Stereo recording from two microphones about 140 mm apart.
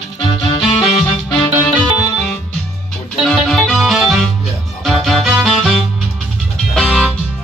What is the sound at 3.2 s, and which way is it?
Music, centre (ahead or behind).